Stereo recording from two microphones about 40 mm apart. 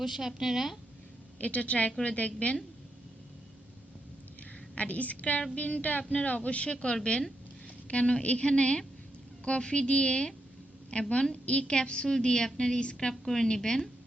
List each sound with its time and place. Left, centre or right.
0.0 s a woman's voice: centre
1.4 s a woman's voice: left
4.7 s a woman's voice: left; by 13.9 s centre